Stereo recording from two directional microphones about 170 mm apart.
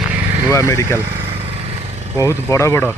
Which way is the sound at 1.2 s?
35° right (ahead or behind).